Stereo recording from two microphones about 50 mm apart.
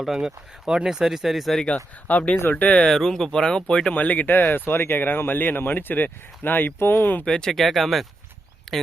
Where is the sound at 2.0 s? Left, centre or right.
Left.